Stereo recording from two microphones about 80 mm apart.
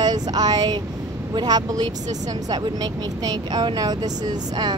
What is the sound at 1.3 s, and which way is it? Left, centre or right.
Speech, right.